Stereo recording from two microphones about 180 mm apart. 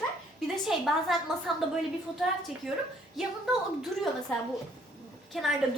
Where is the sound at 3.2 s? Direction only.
Centre (ahead or behind).